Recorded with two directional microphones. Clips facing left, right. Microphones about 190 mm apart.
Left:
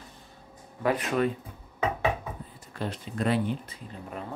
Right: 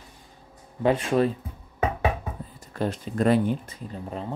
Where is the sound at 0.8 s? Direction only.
30° right (ahead or behind).